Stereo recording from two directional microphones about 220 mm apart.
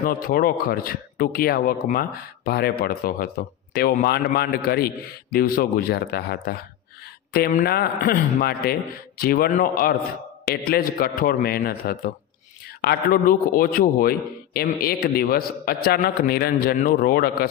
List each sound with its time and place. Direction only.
0.0 s speech: 40° left (ahead or behind)